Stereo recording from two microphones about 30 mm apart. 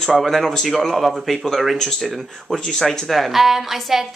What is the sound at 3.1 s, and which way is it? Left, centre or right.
A woman's voice, centre.